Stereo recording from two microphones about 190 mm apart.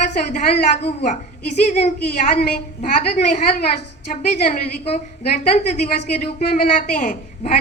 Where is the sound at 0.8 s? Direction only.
40° left (ahead or behind).